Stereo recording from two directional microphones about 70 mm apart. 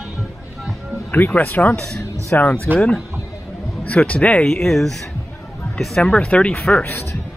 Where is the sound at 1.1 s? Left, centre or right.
Left.